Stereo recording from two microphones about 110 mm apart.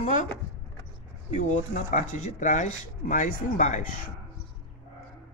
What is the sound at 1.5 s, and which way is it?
Speech, 90° left.